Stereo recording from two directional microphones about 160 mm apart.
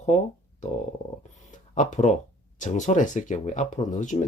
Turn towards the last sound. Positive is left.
turn(degrees=50)  # may be behind; listen again after turning